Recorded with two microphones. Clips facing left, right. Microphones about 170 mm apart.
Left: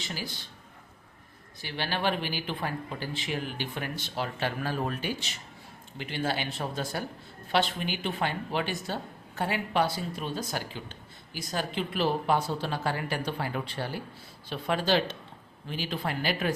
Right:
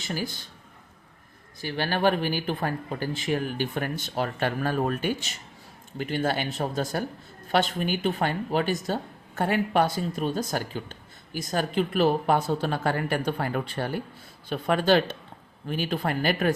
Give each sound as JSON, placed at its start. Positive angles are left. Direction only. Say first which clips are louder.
{"t": 0.0, "sound": "a woman's voice", "louder": "right 6 dB", "side_deg": -50}
{"t": 1.6, "sound": "a woman's voice", "louder": "right 6 dB", "side_deg": -45}